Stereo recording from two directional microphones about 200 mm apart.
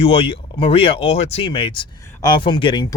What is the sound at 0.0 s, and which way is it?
Speech, 30° left (ahead or behind).